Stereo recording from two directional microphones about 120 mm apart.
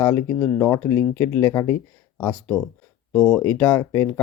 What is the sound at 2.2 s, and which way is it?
Speech, 10° left (ahead or behind).